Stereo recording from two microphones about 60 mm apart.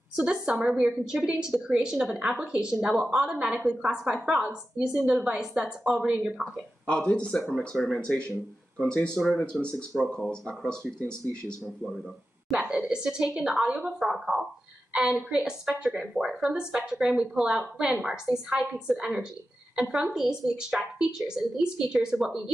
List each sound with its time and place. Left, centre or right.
0.1 s a woman's voice: centre
0.7 s speech: centre
1.0 s a woman's voice: centre
6.9 s speech: centre
11.6 s speech: centre
12.4 s a woman's voice: centre